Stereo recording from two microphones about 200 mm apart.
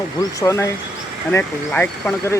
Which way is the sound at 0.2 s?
15° left (ahead or behind).